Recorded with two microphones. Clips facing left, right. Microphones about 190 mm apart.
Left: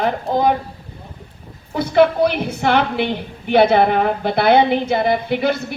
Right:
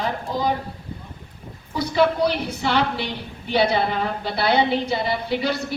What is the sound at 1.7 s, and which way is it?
A woman's voice, 55° left (ahead or behind).